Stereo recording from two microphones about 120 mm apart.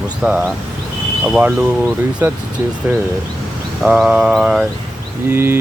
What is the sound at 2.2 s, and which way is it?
Mantra, 20° right (ahead or behind).